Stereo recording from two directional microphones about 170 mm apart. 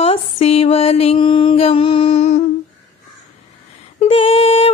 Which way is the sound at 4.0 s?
35° left (ahead or behind).